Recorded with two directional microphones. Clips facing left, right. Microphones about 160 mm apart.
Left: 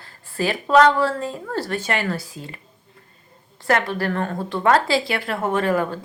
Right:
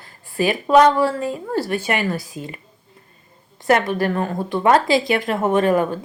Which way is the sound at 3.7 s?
15° right (ahead or behind).